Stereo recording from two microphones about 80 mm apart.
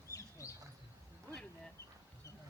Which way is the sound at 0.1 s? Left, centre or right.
Left.